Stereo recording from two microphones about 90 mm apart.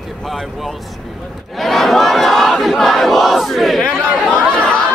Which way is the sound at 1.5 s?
Centre (ahead or behind).